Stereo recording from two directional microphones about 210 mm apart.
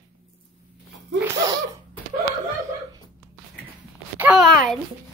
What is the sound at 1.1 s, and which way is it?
Speech, 15° right (ahead or behind).